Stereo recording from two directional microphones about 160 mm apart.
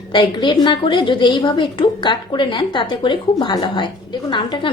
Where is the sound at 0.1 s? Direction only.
30° left (ahead or behind).